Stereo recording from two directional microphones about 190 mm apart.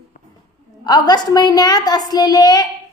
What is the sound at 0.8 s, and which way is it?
A woman's voice, 20° left (ahead or behind).